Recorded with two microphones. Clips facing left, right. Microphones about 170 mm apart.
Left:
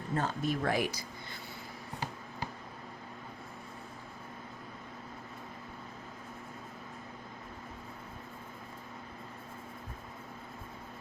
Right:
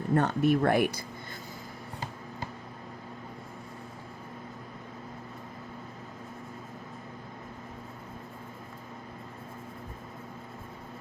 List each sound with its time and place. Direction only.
0.1 s speech: 65° right (ahead or behind)